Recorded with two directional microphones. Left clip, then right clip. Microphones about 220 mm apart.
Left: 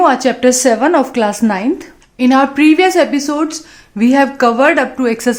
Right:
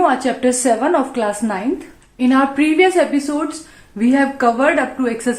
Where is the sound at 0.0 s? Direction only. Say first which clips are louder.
Left 5 dB; 45° left (ahead or behind).